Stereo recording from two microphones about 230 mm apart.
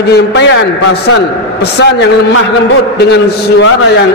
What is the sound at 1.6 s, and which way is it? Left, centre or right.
Speech, left.